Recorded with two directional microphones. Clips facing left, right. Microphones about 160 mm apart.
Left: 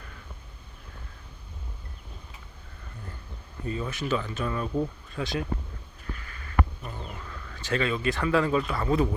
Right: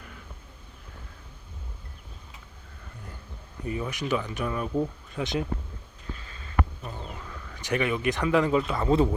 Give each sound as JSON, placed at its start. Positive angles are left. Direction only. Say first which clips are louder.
{"t": 3.7, "sound": "speech", "louder": "even", "side_deg": -15}
{"t": 6.1, "sound": "sniff", "louder": "left 1 dB", "side_deg": -20}
{"t": 7.1, "sound": "speech", "louder": "even", "side_deg": -15}